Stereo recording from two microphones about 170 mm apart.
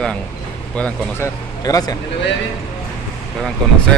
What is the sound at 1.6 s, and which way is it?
Speech, 20° left (ahead or behind).